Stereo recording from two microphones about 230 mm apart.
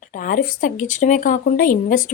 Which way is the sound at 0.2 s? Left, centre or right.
Left.